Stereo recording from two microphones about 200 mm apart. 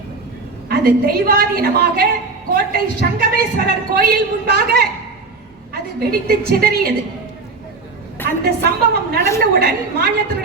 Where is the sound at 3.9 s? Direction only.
45° right (ahead or behind).